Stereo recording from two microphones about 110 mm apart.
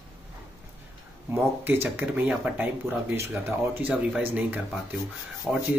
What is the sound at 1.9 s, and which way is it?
Speech, 15° right (ahead or behind).